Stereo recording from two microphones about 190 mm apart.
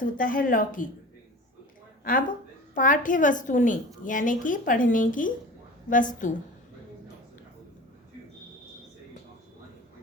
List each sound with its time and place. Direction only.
0.0 s a woman's voice: 45° left (ahead or behind)
2.0 s a woman's voice: 45° left (ahead or behind)